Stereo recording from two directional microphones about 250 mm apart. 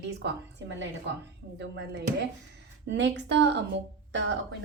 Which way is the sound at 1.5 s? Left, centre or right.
Right.